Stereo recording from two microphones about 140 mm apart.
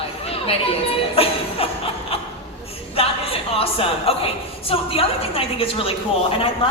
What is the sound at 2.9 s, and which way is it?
A woman's voice, 45° left (ahead or behind).